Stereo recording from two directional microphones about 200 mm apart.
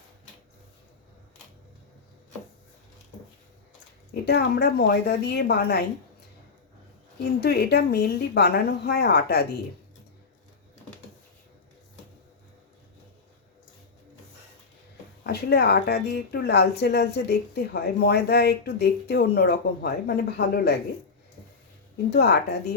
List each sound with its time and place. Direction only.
4.1 s a woman's voice: 55° left (ahead or behind)
7.4 s a woman's voice: 55° left (ahead or behind)
15.2 s a woman's voice: 50° left (ahead or behind)
22.1 s speech: 55° left (ahead or behind)